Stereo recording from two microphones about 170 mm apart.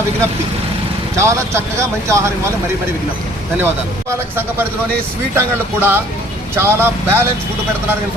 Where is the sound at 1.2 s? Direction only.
15° right (ahead or behind).